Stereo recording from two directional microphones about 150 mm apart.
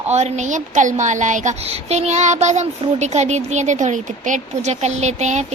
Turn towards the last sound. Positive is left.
turn(degrees=-50)  # may be behind; listen again after turning